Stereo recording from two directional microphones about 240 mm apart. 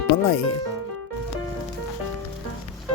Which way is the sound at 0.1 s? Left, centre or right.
Left.